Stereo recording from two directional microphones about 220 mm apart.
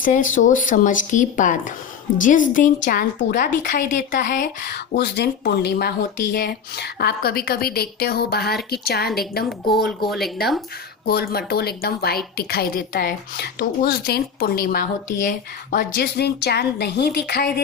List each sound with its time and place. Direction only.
0.0 s a woman's voice: 35° left (ahead or behind)
10.1 s speech: centre (ahead or behind)
11.0 s a woman's voice: 45° left (ahead or behind)